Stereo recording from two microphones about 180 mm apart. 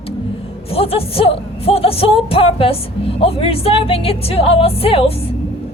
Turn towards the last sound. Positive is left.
turn(degrees=30)  # may be behind; listen again after turning